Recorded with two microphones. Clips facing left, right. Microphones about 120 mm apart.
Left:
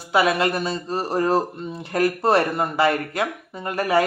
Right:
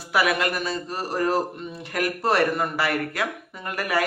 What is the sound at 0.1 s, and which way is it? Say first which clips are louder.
A man's voice: left 3 dB; 25° left (ahead or behind).